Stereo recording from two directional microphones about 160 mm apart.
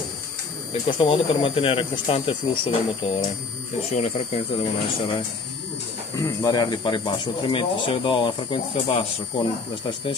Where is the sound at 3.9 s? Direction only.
45° left (ahead or behind).